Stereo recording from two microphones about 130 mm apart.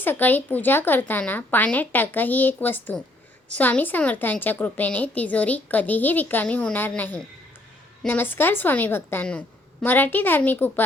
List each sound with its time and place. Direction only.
0.0 s a woman's voice: 15° left (ahead or behind)